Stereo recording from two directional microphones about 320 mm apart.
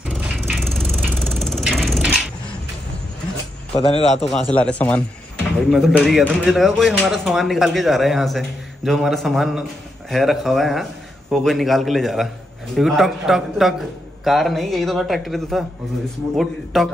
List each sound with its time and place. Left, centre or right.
0.1 s ratchet: centre
3.8 s a man's voice: centre
4.3 s speech: centre